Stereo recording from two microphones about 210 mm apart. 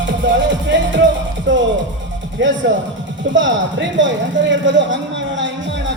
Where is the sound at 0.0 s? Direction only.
60° right (ahead or behind).